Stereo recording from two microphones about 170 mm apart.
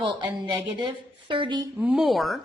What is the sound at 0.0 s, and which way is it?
A woman's voice, 25° right (ahead or behind).